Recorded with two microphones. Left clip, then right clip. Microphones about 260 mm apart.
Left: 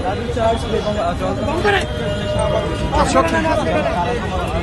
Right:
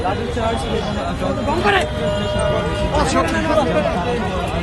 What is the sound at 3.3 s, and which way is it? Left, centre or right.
Speech, left.